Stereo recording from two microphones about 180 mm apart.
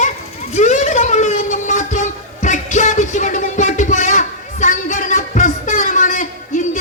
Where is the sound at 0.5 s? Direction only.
40° left (ahead or behind).